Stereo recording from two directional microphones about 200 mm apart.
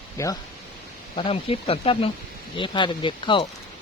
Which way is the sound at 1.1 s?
25° left (ahead or behind).